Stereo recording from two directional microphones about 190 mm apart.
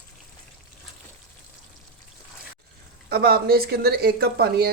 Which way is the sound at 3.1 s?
55° right (ahead or behind).